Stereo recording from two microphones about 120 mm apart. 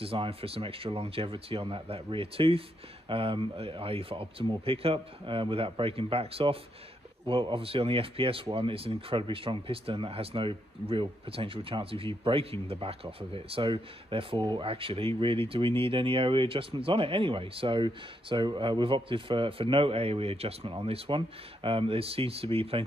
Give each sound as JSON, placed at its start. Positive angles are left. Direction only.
{"t": 0.0, "sound": "speech", "side_deg": -50}